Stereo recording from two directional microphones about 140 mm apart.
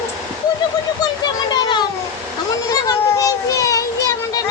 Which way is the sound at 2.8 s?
25° left (ahead or behind).